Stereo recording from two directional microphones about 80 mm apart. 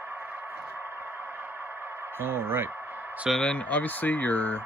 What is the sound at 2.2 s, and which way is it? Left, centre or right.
Speech, right.